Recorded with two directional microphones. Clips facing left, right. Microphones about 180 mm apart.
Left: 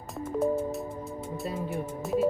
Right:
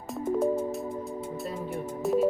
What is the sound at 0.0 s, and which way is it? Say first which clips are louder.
Music: right 2 dB; centre (ahead or behind).